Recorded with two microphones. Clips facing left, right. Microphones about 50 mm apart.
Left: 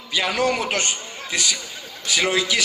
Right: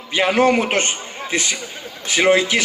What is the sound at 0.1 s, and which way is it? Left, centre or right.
A man's voice, right.